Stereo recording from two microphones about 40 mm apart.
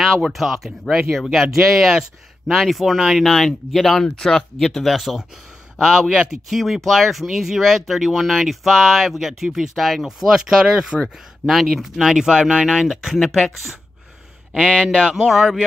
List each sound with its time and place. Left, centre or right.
0.0 s speech: centre
4.0 s speech: centre
4.8 s speech: centre
10.0 s speech: centre
12.4 s speech: right
12.6 s speech: centre
14.9 s speech: centre
15.2 s speech: centre